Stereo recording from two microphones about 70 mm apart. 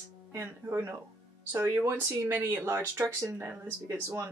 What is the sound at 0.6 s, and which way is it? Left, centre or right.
Speech, right.